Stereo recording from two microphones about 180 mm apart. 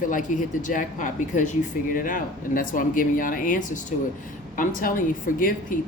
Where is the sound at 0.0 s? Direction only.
45° left (ahead or behind).